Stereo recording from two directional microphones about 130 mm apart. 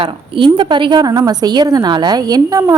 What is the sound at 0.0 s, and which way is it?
A woman's voice, 40° right (ahead or behind).